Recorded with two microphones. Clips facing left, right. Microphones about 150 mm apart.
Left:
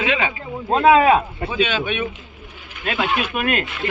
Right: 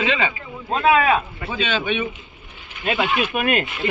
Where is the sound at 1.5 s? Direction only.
5° left (ahead or behind).